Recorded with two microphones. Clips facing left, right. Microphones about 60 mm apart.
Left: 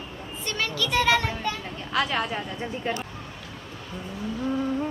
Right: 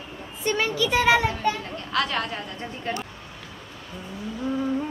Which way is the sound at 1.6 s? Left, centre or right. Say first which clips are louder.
Even; centre.